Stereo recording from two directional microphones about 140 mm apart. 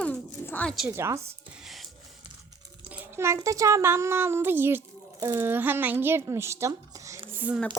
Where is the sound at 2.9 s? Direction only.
15° right (ahead or behind).